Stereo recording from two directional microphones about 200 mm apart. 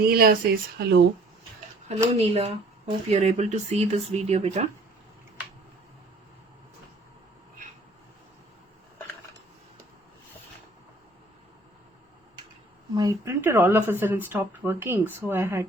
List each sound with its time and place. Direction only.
0.0 s speech: 50° right (ahead or behind)
2.1 s speech: 30° right (ahead or behind)
12.9 s speech: 20° right (ahead or behind)